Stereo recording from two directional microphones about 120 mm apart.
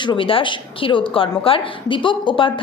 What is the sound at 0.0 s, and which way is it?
A woman's voice, 45° left (ahead or behind).